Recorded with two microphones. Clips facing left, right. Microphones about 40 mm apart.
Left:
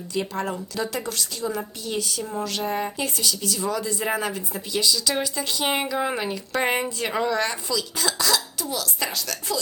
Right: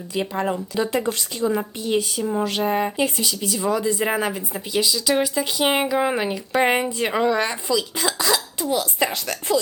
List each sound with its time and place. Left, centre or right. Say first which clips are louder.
0.1 s a woman's voice: right 3 dB; centre
8.6 s speech: right 6 dB; right